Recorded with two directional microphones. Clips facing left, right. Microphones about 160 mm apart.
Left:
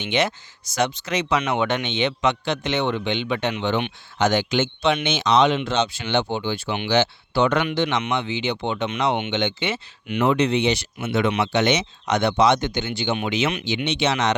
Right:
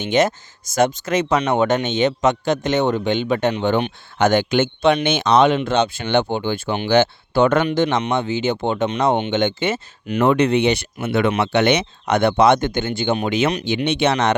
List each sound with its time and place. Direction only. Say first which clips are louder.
0.0 s speech: right 5 dB; 45° right (ahead or behind)
4.2 s speech: right 4 dB; 50° right (ahead or behind)